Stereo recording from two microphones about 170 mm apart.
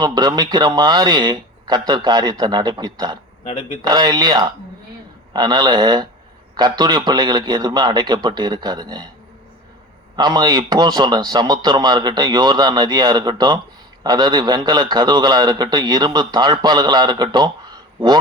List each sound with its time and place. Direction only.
0.0 s a man's voice: 25° right (ahead or behind)
3.4 s speech: 30° left (ahead or behind)
3.8 s a man's voice: 25° right (ahead or behind)
10.2 s a man's voice: 25° right (ahead or behind)